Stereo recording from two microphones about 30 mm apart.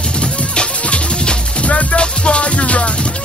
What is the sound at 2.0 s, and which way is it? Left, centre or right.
Music, left.